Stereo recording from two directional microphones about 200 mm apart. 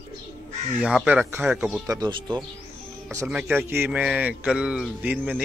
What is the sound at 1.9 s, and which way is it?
Speech, 20° right (ahead or behind).